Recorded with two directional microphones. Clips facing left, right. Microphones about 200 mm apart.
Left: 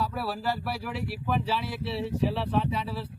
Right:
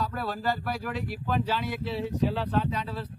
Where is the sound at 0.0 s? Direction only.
5° left (ahead or behind).